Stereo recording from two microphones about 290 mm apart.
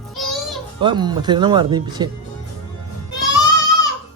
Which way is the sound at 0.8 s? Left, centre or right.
Centre.